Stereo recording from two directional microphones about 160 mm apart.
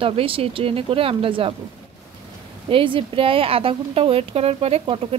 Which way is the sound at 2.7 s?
35° right (ahead or behind).